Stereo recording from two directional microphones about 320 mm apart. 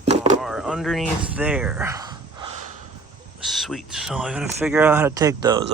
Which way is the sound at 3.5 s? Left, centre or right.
Centre.